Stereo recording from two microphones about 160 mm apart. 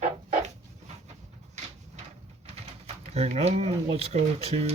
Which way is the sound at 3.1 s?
40° right (ahead or behind).